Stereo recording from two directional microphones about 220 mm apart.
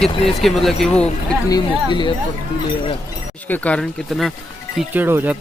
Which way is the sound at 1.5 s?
20° left (ahead or behind).